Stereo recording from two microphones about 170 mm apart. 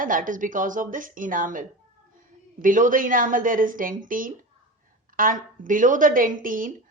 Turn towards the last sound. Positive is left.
turn(degrees=-55)  # may be behind; listen again after turning